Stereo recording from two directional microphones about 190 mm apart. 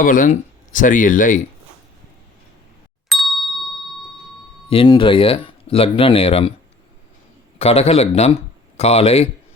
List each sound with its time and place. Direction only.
0.0 s speech: 45° left (ahead or behind)
3.1 s ding: centre (ahead or behind)
4.7 s speech: 25° left (ahead or behind)
7.6 s a man's voice: 30° left (ahead or behind)